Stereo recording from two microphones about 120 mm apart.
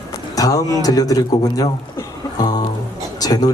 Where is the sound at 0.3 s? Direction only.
30° left (ahead or behind).